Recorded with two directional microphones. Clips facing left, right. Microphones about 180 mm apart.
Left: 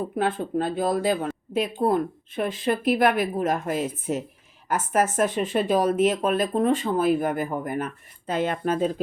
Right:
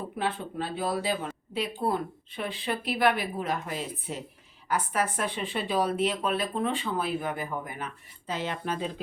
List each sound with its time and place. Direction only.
0.2 s speech: 50° left (ahead or behind)